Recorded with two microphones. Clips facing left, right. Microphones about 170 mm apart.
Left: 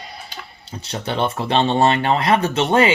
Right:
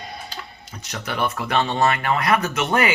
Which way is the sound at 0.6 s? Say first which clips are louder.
Left 7 dB; 30° left (ahead or behind).